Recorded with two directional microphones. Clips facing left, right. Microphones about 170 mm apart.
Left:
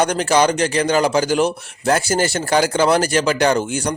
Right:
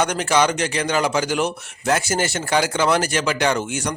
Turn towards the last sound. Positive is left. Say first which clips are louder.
# left 4 dB
turn(degrees=35)  # may be behind; listen again after turning